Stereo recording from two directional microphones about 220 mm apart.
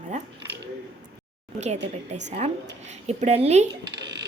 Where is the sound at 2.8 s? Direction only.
30° right (ahead or behind).